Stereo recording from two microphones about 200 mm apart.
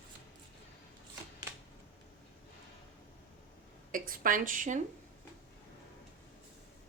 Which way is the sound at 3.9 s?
45° right (ahead or behind).